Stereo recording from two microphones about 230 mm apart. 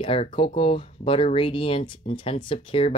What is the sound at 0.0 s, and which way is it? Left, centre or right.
Speech, left.